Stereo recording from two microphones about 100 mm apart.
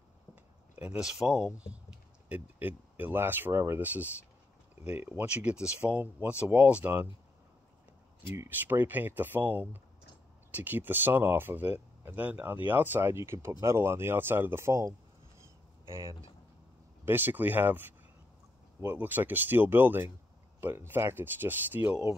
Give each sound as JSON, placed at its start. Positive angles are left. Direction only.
{"t": 0.7, "sound": "speech", "side_deg": -10}
{"t": 8.5, "sound": "speech", "side_deg": -20}
{"t": 17.0, "sound": "speech", "side_deg": -20}